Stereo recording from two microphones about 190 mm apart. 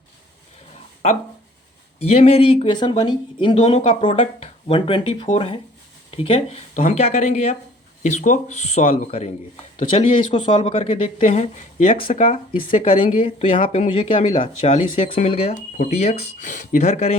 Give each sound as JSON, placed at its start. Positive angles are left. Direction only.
{"t": 2.0, "sound": "speech", "side_deg": 35}